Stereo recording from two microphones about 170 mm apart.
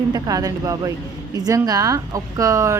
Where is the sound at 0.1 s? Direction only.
20° right (ahead or behind).